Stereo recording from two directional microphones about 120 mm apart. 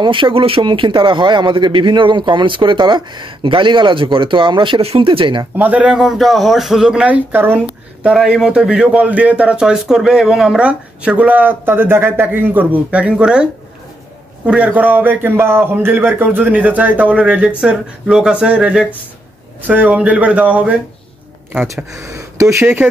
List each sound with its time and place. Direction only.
0.0 s a man's voice: 45° right (ahead or behind)
5.6 s a man's voice: 10° right (ahead or behind)
8.1 s a man's voice: 5° right (ahead or behind)
21.9 s speech: 25° right (ahead or behind)